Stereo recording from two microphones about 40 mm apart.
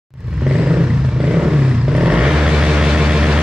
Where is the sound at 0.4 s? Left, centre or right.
Right.